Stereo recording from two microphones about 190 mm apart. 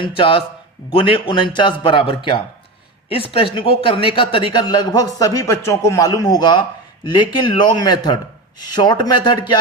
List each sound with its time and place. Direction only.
0.0 s a man's voice: 25° left (ahead or behind)